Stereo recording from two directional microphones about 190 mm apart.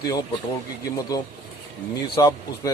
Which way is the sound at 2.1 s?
20° left (ahead or behind).